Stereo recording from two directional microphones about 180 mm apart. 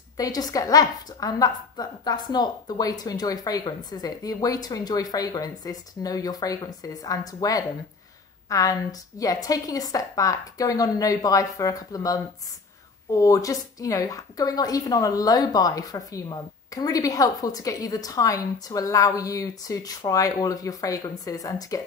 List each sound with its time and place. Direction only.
0.2 s a woman's voice: 20° left (ahead or behind)